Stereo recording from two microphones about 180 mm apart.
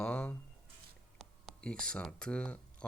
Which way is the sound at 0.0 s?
10° left (ahead or behind).